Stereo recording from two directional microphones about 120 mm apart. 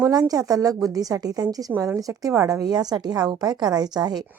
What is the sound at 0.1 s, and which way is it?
A woman's voice, 30° right (ahead or behind).